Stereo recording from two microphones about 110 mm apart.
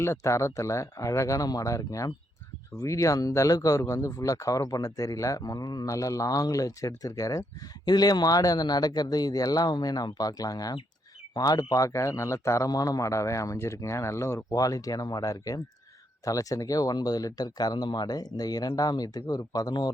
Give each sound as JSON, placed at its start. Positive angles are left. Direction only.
{"t": 0.0, "sound": "speech", "side_deg": 25}